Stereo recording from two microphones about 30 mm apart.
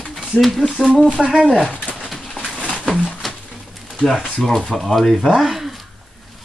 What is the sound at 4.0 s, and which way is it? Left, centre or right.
Speech, centre.